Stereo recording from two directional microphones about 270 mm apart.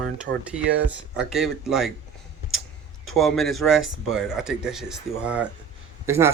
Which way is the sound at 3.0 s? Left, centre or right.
Centre.